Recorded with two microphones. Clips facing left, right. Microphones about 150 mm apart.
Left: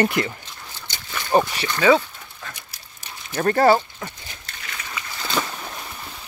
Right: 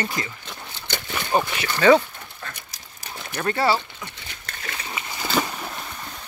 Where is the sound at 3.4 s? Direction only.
45° left (ahead or behind).